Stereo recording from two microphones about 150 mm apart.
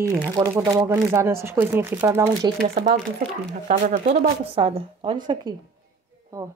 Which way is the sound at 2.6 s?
45° right (ahead or behind).